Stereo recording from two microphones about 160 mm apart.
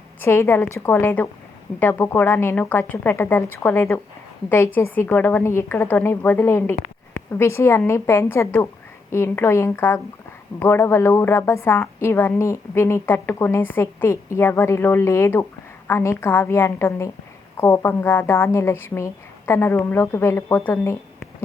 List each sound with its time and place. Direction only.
0.2 s a woman's voice: 15° left (ahead or behind)